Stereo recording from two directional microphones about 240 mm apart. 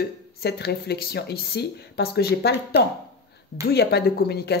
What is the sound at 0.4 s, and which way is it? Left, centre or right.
Speech, left.